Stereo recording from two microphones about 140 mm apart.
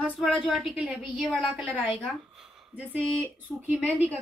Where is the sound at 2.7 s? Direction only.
15° right (ahead or behind).